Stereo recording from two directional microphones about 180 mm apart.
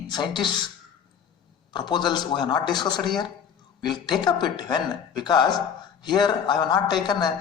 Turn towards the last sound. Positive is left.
turn(degrees=25)  # may be behind; listen again after turning